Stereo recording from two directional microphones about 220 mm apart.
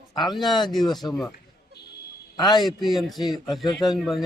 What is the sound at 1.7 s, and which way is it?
Buzzer, 45° left (ahead or behind).